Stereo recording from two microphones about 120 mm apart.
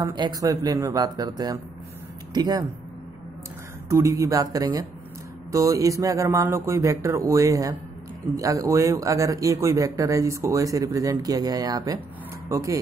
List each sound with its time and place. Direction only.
0.0 s speech: 30° right (ahead or behind)
3.9 s speech: 25° right (ahead or behind)